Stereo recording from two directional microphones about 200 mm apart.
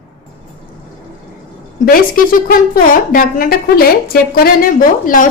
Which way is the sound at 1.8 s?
45° left (ahead or behind).